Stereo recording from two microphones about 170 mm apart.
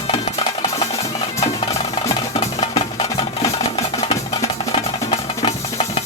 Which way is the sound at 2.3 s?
30° left (ahead or behind).